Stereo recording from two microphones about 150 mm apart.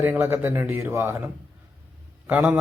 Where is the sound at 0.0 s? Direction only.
15° right (ahead or behind).